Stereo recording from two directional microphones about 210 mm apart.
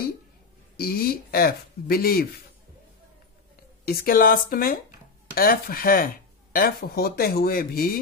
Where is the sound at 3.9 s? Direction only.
45° left (ahead or behind).